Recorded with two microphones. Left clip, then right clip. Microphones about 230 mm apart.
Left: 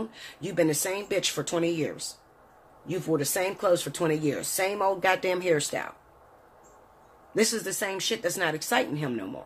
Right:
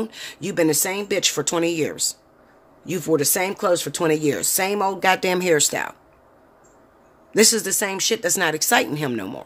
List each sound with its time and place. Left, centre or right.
0.0 s speech: right
7.3 s speech: right